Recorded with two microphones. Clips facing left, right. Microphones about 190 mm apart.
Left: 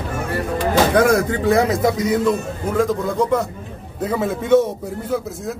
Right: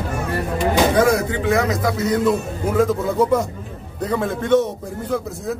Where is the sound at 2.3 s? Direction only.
5° right (ahead or behind).